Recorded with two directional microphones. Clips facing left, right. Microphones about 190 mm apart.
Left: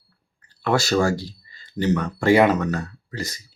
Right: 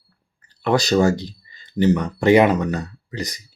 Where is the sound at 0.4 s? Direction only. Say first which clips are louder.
Right 2 dB; 15° right (ahead or behind).